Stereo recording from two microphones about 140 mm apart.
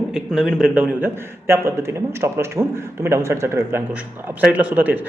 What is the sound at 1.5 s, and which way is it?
A man's voice, 20° right (ahead or behind).